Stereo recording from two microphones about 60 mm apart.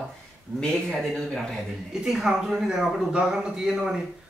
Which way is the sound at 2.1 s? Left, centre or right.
Centre.